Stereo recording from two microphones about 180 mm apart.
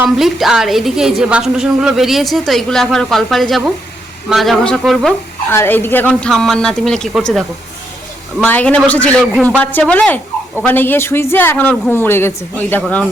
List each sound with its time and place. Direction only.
0.0 s a woman's voice: centre (ahead or behind)
5.5 s a woman's voice: 10° left (ahead or behind)